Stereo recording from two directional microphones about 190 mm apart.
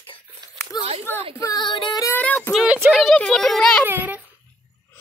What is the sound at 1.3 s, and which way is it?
Female singing, 20° left (ahead or behind).